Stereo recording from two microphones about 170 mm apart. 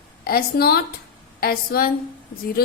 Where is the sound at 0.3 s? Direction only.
60° left (ahead or behind).